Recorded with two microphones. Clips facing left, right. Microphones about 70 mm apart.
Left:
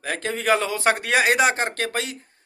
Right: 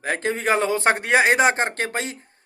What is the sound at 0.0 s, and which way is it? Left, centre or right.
A man's voice, right.